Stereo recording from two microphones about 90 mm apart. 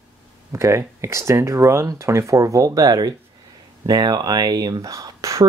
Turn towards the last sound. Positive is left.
turn(degrees=-40)  # may be behind; listen again after turning